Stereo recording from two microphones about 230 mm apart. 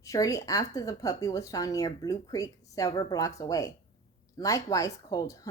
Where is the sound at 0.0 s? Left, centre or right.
Centre.